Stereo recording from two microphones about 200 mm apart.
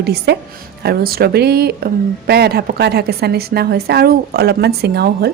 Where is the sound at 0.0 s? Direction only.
55° right (ahead or behind).